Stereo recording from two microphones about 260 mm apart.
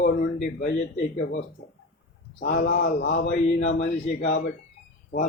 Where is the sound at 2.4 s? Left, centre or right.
Left.